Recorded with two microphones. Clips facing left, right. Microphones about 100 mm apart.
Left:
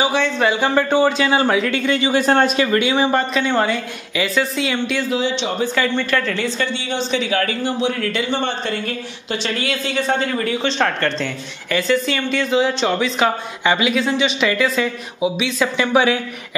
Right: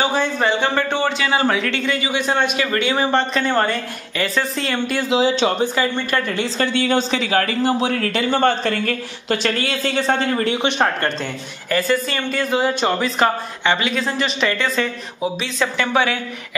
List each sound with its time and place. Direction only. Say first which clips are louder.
0.4 s a man's voice: left 4 dB; 10° left (ahead or behind); by 2.1 s 25° left (ahead or behind)
2.1 s a man's voice: left 5 dB; 40° left (ahead or behind)
2.5 s a man's voice: left 3 dB; 20° left (ahead or behind)
2.9 s speech: left 1 dB; 10° left (ahead or behind)
5.6 s speech: left 1 dB; 15° right (ahead or behind)
6.6 s speech: right 4 dB; 50° right (ahead or behind)
7.2 s a man's voice: right 1 dB; 35° right (ahead or behind)
8.1 s speech: right 4 dB; 45° right (ahead or behind)
10.6 s speech: even; 15° right (ahead or behind)
13.7 s speech: left 3 dB; 10° left (ahead or behind)